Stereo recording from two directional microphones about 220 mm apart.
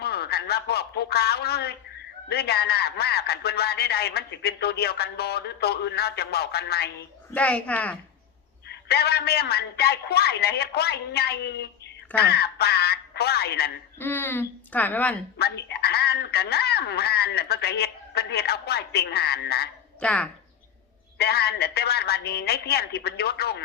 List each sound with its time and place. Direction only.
0.0 s a man's voice: 45° left (ahead or behind)
7.3 s speech: 5° left (ahead or behind)
8.6 s a man's voice: 45° left (ahead or behind)
14.0 s speech: 10° left (ahead or behind)
15.4 s a man's voice: 45° left (ahead or behind)
20.0 s speech: 5° left (ahead or behind)
21.2 s a man's voice: 45° left (ahead or behind)